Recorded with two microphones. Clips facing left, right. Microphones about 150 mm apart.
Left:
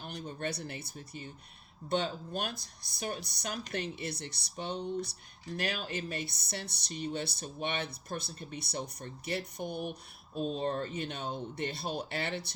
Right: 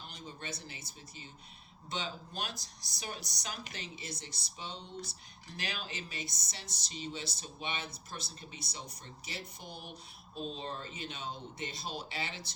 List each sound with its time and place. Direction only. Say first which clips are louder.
0.0 s speech: left 8 dB; 60° left (ahead or behind)